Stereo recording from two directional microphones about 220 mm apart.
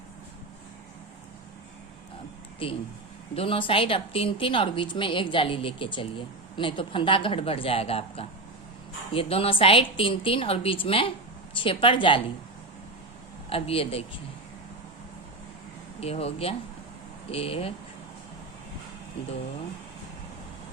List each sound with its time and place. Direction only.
2.6 s a woman's voice: 25° left (ahead or behind)
13.5 s a woman's voice: 25° left (ahead or behind)
16.0 s a woman's voice: 25° left (ahead or behind)